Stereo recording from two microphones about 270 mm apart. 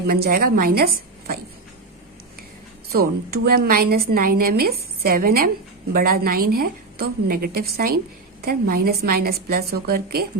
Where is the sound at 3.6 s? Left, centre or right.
Right.